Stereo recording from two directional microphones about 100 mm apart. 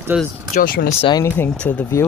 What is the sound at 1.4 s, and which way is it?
Speech, 15° left (ahead or behind).